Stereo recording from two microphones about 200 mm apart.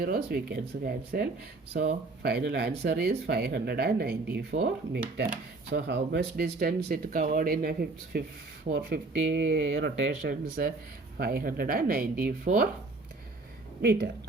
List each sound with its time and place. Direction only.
0.0 s speech: 50° right (ahead or behind)
8.7 s speech: 60° right (ahead or behind)